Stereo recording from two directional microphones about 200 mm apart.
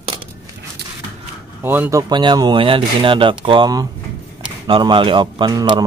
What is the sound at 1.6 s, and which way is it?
Speech, 10° right (ahead or behind).